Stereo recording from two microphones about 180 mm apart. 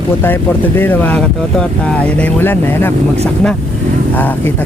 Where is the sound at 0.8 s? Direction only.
10° left (ahead or behind).